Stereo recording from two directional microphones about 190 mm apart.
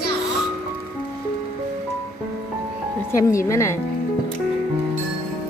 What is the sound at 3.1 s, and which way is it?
Speech, 15° left (ahead or behind).